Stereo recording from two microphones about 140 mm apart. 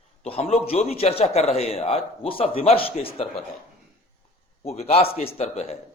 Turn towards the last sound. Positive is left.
turn(degrees=45)  # may be behind; listen again after turning